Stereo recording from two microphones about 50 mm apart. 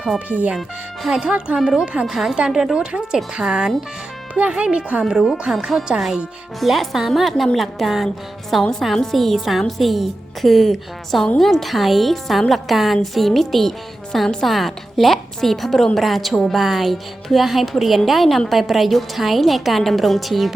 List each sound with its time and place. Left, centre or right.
0.3 s speech: right
1.1 s speech: centre
2.1 s speech: centre
2.7 s speech: centre
5.5 s a woman's voice: centre